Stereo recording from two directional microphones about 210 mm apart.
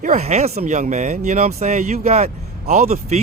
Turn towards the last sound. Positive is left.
turn(degrees=-35)  # may be behind; listen again after turning